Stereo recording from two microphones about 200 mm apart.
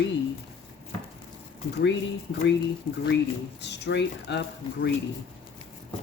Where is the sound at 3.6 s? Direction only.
60° left (ahead or behind).